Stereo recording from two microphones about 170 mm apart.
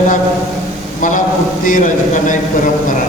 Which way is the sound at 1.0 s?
50° left (ahead or behind).